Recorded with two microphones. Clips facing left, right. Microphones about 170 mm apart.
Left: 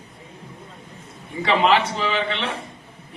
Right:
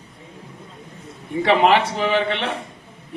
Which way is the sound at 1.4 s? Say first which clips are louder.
Right 2 dB; 55° right (ahead or behind).